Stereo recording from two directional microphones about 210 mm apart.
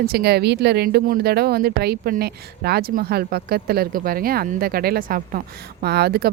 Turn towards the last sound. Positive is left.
turn(degrees=-50)  # may be behind; listen again after turning